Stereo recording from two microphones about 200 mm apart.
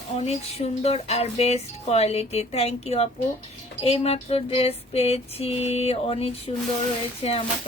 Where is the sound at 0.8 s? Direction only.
30° left (ahead or behind).